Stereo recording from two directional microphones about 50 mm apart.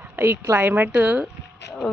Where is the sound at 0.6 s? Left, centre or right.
Right.